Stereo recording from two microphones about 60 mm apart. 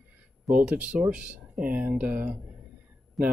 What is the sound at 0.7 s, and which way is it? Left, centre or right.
Speech, centre.